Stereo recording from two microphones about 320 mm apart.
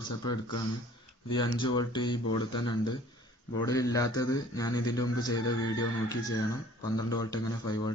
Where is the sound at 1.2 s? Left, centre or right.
Centre.